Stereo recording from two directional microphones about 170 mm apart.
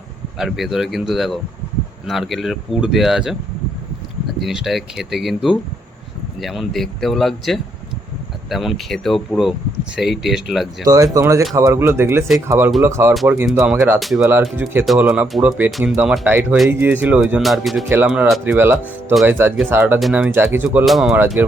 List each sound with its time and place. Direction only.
0.3 s speech: centre (ahead or behind)
4.4 s speech: centre (ahead or behind)
10.8 s speech: 20° right (ahead or behind)
14.0 s speech: centre (ahead or behind)
14.5 s speech: 10° right (ahead or behind)
17.8 s speech: 10° right (ahead or behind)
20.7 s speech: centre (ahead or behind)